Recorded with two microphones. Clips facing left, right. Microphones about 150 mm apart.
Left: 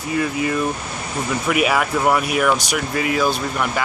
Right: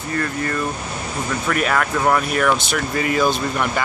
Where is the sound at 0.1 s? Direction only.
10° left (ahead or behind).